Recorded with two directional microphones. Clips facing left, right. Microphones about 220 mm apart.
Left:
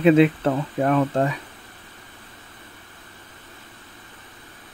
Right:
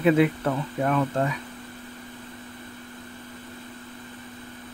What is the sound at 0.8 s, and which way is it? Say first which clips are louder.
Speech: left 4 dB; 40° left (ahead or behind).